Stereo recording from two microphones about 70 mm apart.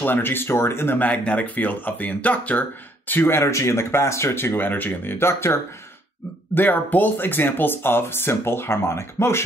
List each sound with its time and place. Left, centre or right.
0.0 s speech: left
6.5 s speech: left